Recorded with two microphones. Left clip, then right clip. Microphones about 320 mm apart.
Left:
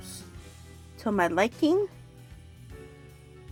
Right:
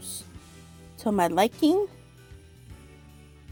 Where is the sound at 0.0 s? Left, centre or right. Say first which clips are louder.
Right 3 dB; right.